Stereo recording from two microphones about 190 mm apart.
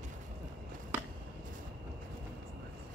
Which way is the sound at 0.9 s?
10° right (ahead or behind).